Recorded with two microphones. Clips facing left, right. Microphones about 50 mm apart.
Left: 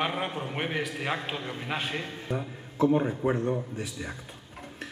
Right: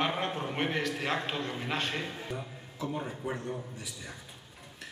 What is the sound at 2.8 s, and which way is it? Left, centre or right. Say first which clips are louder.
Speech: left 11 dB; left.